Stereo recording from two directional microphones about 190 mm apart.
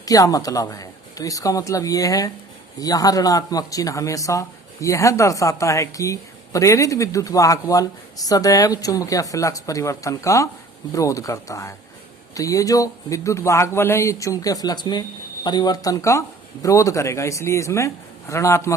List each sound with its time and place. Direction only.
0.0 s a man's voice: 20° left (ahead or behind)